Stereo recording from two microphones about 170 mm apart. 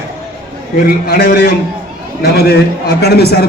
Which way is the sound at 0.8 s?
60° left (ahead or behind).